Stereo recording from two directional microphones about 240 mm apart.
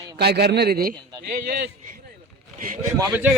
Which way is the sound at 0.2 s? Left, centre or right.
Right.